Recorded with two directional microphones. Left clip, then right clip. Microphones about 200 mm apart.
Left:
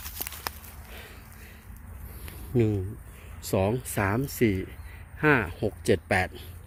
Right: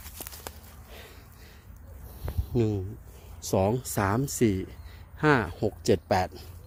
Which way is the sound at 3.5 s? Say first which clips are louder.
Right 1 dB; 15° right (ahead or behind).